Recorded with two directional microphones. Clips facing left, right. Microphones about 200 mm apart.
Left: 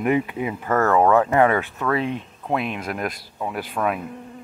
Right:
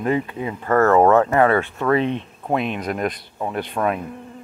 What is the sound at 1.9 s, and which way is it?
Speech, 5° left (ahead or behind).